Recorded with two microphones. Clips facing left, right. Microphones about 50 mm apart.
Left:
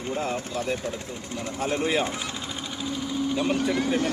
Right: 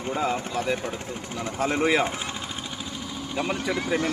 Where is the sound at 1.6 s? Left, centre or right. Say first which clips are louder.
Right 3 dB; right.